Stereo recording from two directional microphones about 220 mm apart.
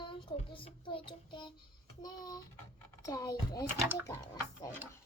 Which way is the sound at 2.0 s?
15° left (ahead or behind).